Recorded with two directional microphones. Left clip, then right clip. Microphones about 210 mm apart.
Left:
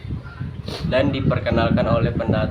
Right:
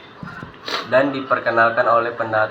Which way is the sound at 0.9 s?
30° left (ahead or behind).